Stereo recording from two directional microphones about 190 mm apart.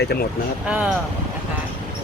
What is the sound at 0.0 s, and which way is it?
Speech, 60° left (ahead or behind).